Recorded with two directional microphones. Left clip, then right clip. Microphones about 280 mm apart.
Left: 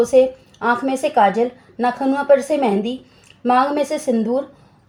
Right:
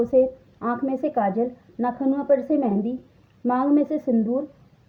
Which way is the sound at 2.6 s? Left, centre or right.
Left.